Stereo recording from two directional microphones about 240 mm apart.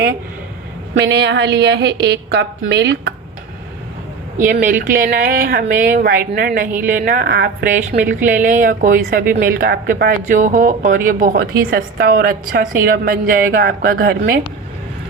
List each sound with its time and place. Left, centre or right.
0.9 s a woman's voice: right
4.5 s speech: right